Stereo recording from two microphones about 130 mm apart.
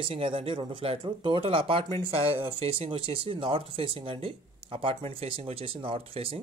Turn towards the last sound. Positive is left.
turn(degrees=-45)  # may be behind; listen again after turning